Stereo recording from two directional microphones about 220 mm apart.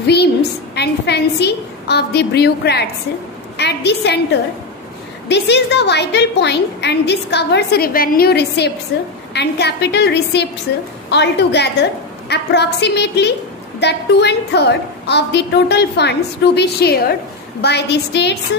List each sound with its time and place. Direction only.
0.0 s a woman's voice: 50° left (ahead or behind)